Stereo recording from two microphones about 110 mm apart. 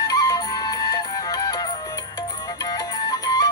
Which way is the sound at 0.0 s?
35° left (ahead or behind).